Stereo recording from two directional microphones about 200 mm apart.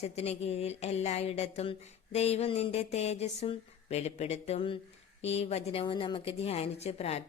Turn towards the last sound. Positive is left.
turn(degrees=30)  # may be behind; listen again after turning